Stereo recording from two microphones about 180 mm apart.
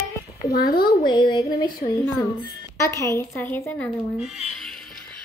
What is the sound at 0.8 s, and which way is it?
Speech, 25° left (ahead or behind).